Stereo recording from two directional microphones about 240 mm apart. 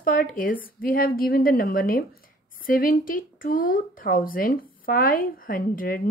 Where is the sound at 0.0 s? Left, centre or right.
Left.